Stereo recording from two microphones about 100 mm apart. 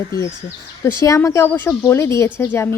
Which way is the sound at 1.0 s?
35° left (ahead or behind).